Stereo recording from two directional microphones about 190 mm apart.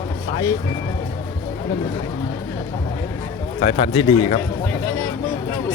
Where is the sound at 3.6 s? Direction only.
30° left (ahead or behind).